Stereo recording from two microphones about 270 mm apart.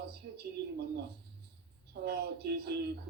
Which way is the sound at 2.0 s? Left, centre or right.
Right.